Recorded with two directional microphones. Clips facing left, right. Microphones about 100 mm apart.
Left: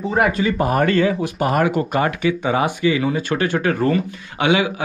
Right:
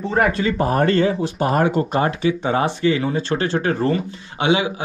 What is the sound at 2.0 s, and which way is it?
Speech, 25° right (ahead or behind).